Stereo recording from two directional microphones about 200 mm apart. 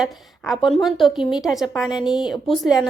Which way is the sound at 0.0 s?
Centre (ahead or behind).